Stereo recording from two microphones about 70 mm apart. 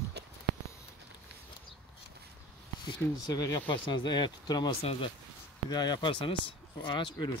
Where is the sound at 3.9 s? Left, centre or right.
Left.